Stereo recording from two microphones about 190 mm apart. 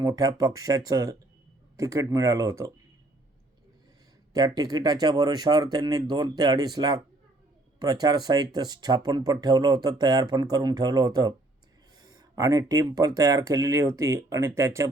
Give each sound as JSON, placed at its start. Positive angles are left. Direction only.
{"t": 0.0, "sound": "speech", "side_deg": -20}
{"t": 4.4, "sound": "speech", "side_deg": -20}